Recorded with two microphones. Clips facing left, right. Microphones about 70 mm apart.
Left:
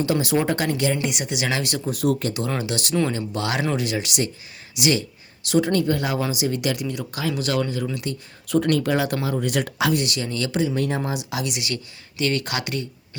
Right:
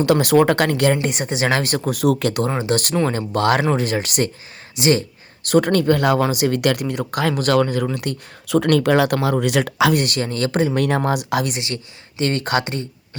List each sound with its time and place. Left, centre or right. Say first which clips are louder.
0.0 s speech: right 7 dB; right
1.0 s speech: right 5 dB; right
1.8 s speech: right 4 dB; right
2.6 s speech: right 4 dB; right
8.0 s speech: right 4 dB; right
9.9 s speech: right 4 dB; right
10.8 s speech: right 6 dB; right
11.5 s speech: right 2 dB; right